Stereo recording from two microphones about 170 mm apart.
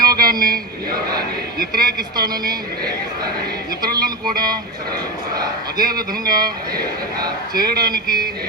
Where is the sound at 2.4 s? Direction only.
60° right (ahead or behind).